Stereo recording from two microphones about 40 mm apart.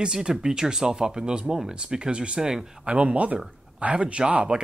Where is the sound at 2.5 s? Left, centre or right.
Centre.